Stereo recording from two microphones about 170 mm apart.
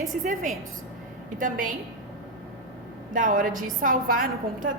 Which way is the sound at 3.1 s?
50° right (ahead or behind).